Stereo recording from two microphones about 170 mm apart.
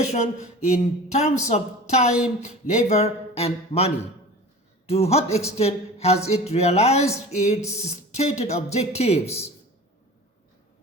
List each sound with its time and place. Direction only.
0.7 s speech: 40° left (ahead or behind)
7.6 s speech: 15° left (ahead or behind)
7.9 s speech: 40° left (ahead or behind)